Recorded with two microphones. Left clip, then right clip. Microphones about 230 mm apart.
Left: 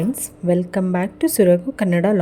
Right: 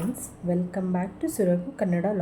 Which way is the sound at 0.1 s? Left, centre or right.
Left.